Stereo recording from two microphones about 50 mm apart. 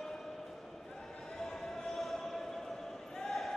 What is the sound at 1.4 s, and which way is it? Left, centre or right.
Basketball bounce, centre.